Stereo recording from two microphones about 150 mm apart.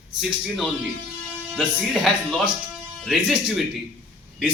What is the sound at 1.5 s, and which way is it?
A man's voice, centre (ahead or behind).